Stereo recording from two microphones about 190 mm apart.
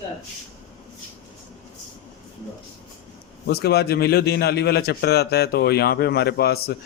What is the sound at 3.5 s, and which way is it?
Speech, 55° left (ahead or behind).